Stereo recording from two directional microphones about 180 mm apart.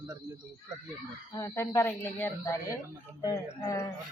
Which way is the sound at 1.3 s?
15° left (ahead or behind).